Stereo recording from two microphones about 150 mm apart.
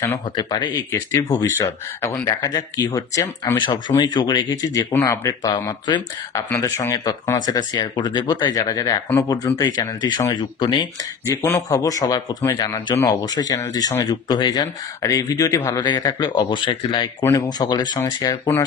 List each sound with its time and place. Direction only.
0.4 s speech: 30° left (ahead or behind)
2.5 s speech: 25° left (ahead or behind)
5.5 s speech: 30° left (ahead or behind)
6.5 s speech: 20° left (ahead or behind)